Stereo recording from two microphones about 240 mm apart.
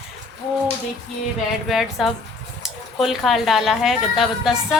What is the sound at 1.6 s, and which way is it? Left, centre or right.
Speech, centre.